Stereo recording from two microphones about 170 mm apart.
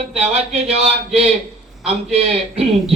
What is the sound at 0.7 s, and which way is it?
A man's voice, 35° right (ahead or behind).